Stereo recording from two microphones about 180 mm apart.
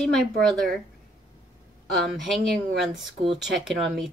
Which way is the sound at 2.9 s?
30° right (ahead or behind).